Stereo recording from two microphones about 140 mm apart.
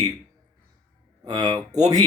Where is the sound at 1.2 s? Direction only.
30° right (ahead or behind).